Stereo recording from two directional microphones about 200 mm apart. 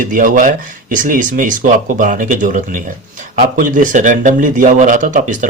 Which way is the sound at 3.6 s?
40° right (ahead or behind).